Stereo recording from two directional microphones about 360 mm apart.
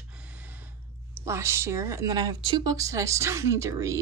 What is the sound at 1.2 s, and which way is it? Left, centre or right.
A woman's voice, centre.